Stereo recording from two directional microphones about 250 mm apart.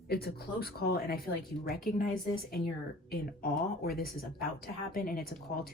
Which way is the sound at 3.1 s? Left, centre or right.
Left.